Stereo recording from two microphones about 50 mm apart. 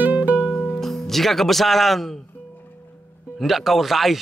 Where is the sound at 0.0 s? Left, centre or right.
Right.